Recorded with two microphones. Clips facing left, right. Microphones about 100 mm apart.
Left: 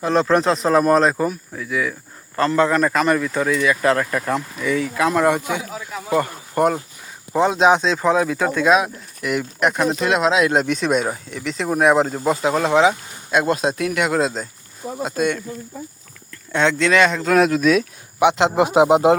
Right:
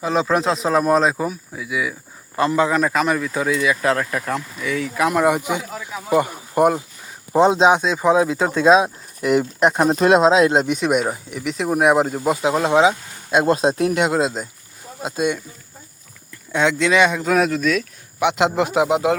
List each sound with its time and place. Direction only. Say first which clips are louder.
0.0 s speech: left 2 dB; 5° right (ahead or behind)
4.9 s speech: right 1 dB; 10° right (ahead or behind)
7.7 s speech: even; 10° right (ahead or behind); by 10.5 s 30° right (ahead or behind)
10.5 s speech: right 1 dB; 20° right (ahead or behind)
16.5 s speech: even; 10° right (ahead or behind); by 19.1 s 25° left (ahead or behind)